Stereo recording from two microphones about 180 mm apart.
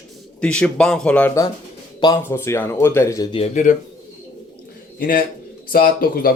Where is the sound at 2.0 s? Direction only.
20° left (ahead or behind).